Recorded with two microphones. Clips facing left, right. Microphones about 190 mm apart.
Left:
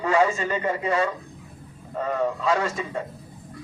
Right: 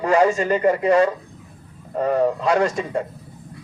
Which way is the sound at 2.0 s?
40° right (ahead or behind).